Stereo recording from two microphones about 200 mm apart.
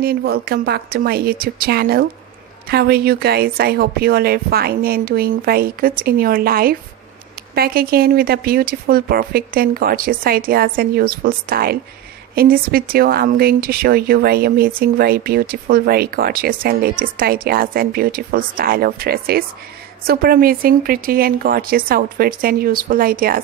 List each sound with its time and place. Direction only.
0.0 s speech: 50° right (ahead or behind)